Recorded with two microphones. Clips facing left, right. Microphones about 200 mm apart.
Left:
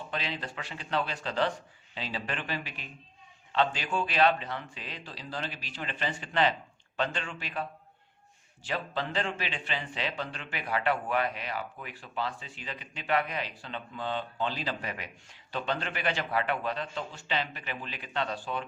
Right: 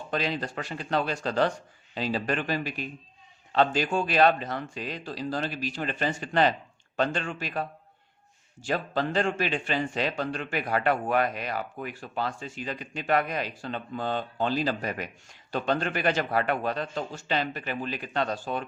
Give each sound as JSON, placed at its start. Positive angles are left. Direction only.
{"t": 0.1, "sound": "speech", "side_deg": -40}